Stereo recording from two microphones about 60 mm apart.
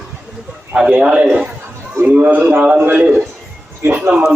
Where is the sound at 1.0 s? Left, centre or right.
Right.